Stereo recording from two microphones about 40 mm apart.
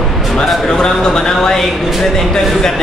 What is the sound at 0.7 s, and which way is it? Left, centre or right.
Speech, centre.